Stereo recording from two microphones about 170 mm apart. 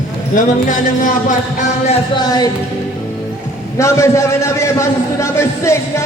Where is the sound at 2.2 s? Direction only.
25° left (ahead or behind).